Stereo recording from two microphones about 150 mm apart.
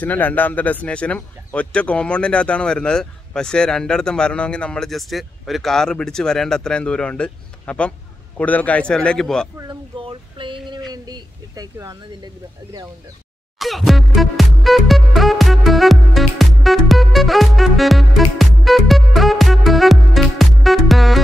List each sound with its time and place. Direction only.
0.0 s a man's voice: 10° left (ahead or behind)
9.6 s speech: 35° right (ahead or behind)
13.6 s music: centre (ahead or behind)